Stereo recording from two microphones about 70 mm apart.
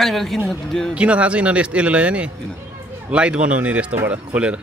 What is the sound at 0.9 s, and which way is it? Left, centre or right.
A man's voice, centre.